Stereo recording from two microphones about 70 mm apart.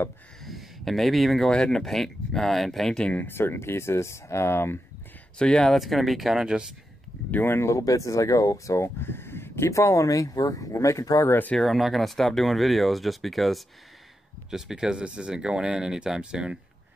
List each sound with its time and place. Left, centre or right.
0.5 s speech: centre
3.2 s speech: left
5.4 s speech: centre
5.8 s speech: centre
7.2 s speech: left
9.0 s a sound: left
9.7 s speech: left
11.5 s speech: centre